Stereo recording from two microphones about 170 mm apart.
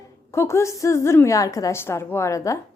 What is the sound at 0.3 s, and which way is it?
A woman's voice, 15° left (ahead or behind).